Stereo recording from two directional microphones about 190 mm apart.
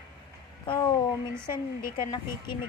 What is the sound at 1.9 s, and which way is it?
Speech, 25° left (ahead or behind).